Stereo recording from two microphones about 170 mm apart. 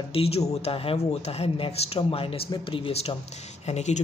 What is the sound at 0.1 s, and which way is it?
Speech, 35° left (ahead or behind).